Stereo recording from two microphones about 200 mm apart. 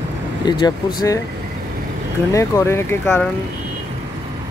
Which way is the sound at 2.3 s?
15° left (ahead or behind).